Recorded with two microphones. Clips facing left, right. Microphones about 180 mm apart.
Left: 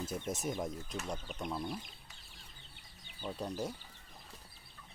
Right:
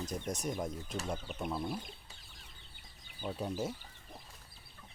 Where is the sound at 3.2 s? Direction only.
5° right (ahead or behind).